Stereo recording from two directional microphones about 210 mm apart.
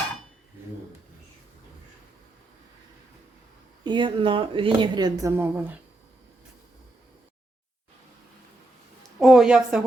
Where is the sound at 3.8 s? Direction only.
20° right (ahead or behind).